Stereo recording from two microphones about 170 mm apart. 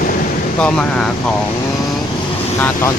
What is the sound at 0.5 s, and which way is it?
Speech, 5° left (ahead or behind).